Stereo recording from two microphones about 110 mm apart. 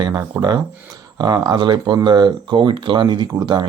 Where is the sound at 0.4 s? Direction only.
25° right (ahead or behind).